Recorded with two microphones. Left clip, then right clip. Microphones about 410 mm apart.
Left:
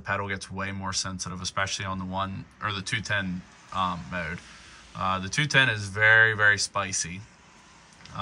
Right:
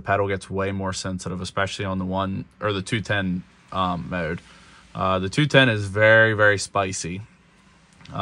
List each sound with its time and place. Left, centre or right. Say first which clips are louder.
0.1 s speech: right 8 dB; centre